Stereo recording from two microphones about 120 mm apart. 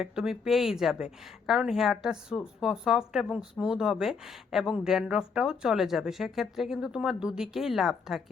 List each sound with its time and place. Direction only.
0.0 s speech: 5° right (ahead or behind)